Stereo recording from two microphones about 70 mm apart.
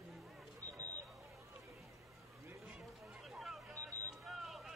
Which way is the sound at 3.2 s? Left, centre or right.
Centre.